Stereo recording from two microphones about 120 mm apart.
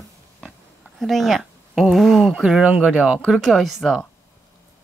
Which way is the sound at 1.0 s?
Centre (ahead or behind).